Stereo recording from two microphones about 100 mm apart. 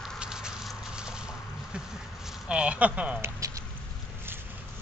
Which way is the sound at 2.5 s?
10° right (ahead or behind).